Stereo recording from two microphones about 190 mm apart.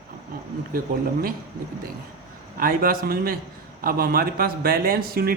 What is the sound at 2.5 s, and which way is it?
A man's voice, 50° right (ahead or behind).